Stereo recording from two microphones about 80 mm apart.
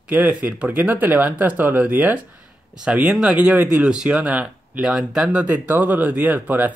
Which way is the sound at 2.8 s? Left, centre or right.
Centre.